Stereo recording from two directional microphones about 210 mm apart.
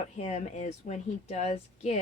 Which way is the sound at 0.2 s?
30° left (ahead or behind).